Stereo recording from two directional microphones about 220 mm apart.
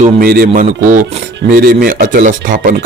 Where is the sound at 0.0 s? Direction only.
45° right (ahead or behind).